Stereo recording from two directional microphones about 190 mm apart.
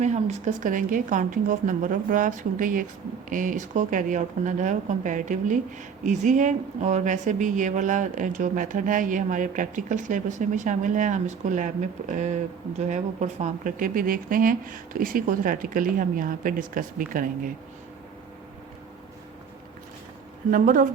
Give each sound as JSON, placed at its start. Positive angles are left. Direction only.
{"t": 0.0, "sound": "speech", "side_deg": -40}
{"t": 20.5, "sound": "speech", "side_deg": -45}